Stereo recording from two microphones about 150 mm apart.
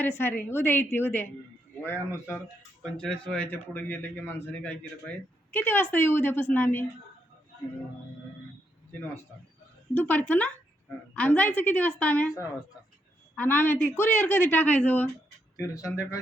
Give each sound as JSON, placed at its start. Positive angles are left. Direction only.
{"t": 0.0, "sound": "a man's voice", "side_deg": 15}
{"t": 2.8, "sound": "a man's voice", "side_deg": 5}
{"t": 9.9, "sound": "a man's voice", "side_deg": 10}
{"t": 12.3, "sound": "speech", "side_deg": 20}
{"t": 13.3, "sound": "a man's voice", "side_deg": 10}
{"t": 15.5, "sound": "speech", "side_deg": 20}